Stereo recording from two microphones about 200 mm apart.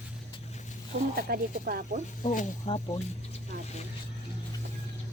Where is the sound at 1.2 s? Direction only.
50° right (ahead or behind).